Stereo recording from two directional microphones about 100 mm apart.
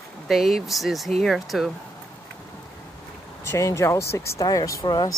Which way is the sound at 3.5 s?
30° left (ahead or behind).